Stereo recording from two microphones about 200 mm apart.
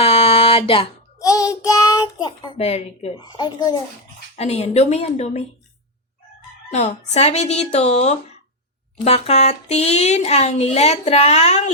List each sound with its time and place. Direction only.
0.0 s a sound: 30° left (ahead or behind)
0.7 s a child's voice: 20° left (ahead or behind)
3.2 s a woman's voice: 20° left (ahead or behind)
4.4 s speech: 30° left (ahead or behind)
6.7 s speech: 35° left (ahead or behind)